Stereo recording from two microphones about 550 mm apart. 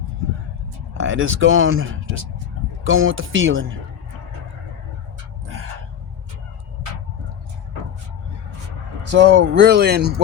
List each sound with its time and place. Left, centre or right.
1.0 s speech: right
9.1 s speech: centre